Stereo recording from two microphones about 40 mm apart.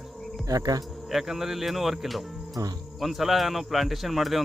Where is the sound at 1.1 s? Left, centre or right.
Centre.